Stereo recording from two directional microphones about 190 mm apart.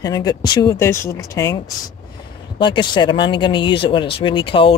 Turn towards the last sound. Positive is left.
turn(degrees=25)  # may be behind; listen again after turning